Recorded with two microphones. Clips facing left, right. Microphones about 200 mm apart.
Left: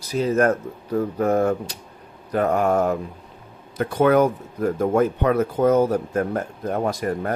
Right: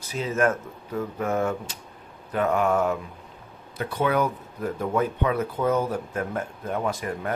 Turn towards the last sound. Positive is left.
turn(degrees=40)  # may be behind; listen again after turning